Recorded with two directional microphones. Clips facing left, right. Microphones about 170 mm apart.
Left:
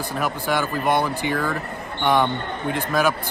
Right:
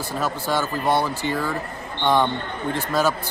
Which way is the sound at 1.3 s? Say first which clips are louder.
Left 1 dB; 10° right (ahead or behind).